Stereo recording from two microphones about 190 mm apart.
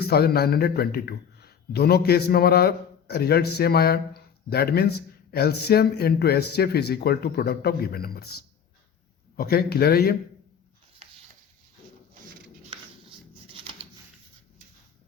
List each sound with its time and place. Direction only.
0.0 s a man's voice: 55° left (ahead or behind)